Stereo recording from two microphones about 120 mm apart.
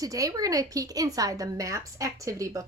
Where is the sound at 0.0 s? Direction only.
30° right (ahead or behind).